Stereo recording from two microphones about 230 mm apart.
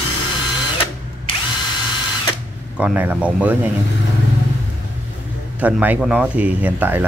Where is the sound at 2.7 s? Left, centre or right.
Centre.